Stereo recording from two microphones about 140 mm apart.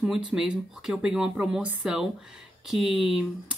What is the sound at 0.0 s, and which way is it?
A woman's voice, 5° right (ahead or behind).